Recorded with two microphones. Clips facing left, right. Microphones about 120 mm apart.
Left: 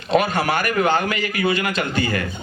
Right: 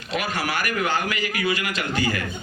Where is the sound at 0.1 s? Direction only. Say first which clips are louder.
Left 8 dB; 30° left (ahead or behind).